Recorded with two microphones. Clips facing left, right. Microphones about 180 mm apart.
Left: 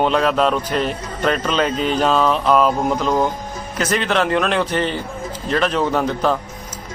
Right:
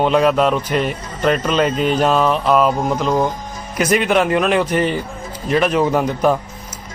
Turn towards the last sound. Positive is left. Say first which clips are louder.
# right 2 dB
turn(degrees=-10)  # may be behind; listen again after turning